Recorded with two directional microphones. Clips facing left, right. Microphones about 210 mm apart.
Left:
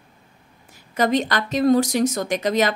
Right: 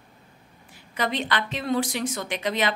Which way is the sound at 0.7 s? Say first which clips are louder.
Left 8 dB; 40° left (ahead or behind).